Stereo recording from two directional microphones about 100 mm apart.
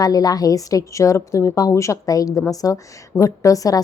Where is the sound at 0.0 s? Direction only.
40° left (ahead or behind).